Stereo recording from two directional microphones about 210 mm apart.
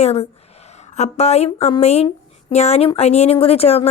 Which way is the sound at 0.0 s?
30° left (ahead or behind).